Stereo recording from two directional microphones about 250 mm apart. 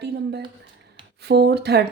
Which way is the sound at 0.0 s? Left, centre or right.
Right.